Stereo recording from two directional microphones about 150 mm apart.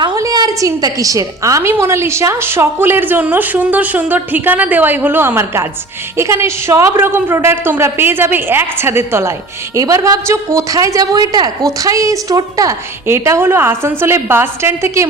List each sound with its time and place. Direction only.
0.0 s a woman's voice: 25° right (ahead or behind)